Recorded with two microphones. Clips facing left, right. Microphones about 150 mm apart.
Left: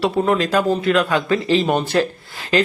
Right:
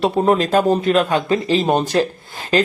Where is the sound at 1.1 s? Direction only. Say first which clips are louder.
Right 1 dB; 25° right (ahead or behind).